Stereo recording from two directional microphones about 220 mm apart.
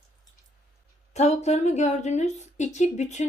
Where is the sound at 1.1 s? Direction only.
30° left (ahead or behind).